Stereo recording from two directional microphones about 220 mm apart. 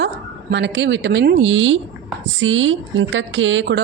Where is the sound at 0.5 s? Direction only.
55° right (ahead or behind).